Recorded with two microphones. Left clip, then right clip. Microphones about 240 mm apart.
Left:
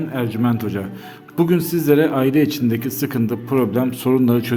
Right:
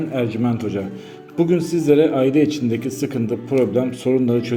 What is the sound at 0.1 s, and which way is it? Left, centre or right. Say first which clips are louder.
A man's voice: left 1 dB; centre.